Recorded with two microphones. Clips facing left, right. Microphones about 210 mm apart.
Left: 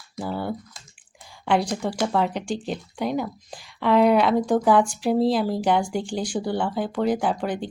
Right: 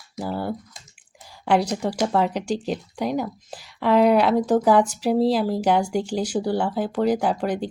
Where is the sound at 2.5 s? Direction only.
40° right (ahead or behind).